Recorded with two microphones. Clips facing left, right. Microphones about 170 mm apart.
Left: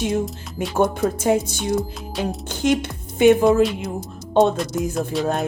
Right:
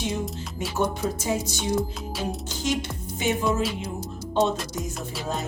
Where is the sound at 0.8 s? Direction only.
55° left (ahead or behind).